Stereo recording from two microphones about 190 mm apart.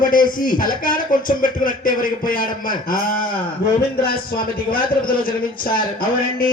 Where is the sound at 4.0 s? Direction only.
50° left (ahead or behind).